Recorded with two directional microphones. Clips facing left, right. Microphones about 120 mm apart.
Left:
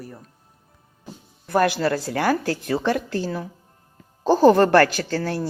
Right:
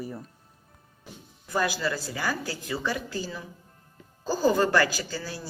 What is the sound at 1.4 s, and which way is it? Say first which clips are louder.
A woman's voice: left 8 dB; 65° left (ahead or behind).